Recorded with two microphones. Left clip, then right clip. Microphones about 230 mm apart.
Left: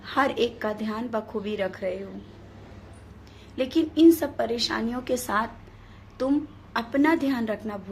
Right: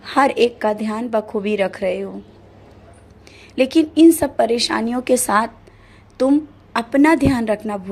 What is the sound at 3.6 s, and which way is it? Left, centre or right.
A woman's voice, right.